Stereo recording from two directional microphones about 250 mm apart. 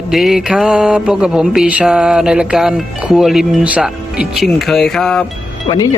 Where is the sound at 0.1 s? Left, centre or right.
Centre.